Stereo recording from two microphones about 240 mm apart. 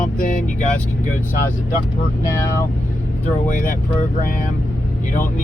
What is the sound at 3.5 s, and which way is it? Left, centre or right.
Speech, left.